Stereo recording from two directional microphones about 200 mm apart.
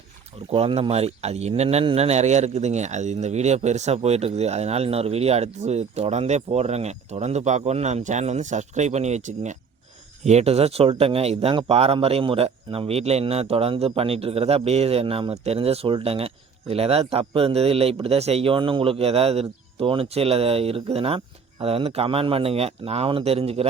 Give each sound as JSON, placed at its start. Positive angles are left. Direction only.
{"t": 0.5, "sound": "speech", "side_deg": -30}